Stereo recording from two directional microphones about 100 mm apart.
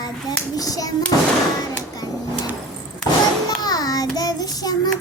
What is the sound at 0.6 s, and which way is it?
Child singing, 35° left (ahead or behind).